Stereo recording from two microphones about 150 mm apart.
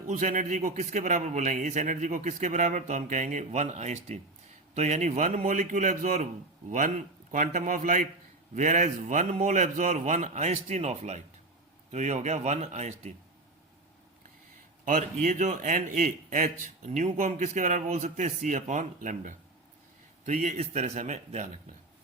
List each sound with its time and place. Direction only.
0.1 s a man's voice: 60° right (ahead or behind)
14.8 s a man's voice: 55° right (ahead or behind)